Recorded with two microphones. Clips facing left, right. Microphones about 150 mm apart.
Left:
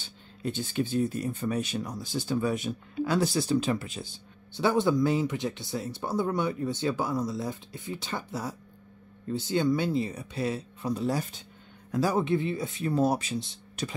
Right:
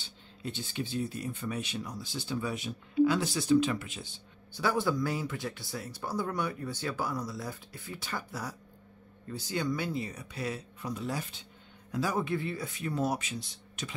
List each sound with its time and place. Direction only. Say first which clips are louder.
0.4 s speech: left 7 dB; 50° left (ahead or behind)
4.5 s speech: left 5 dB; 25° left (ahead or behind)
12.2 s speech: left 5 dB; 20° left (ahead or behind)